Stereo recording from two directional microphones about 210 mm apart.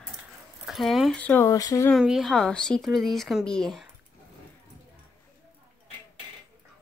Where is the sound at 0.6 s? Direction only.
Centre (ahead or behind); by 1.9 s 15° left (ahead or behind).